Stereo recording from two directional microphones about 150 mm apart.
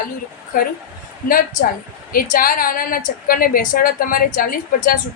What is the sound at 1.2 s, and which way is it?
A woman's voice, 70° left (ahead or behind).